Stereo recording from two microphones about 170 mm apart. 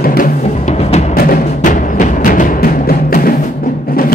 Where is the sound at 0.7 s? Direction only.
40° left (ahead or behind).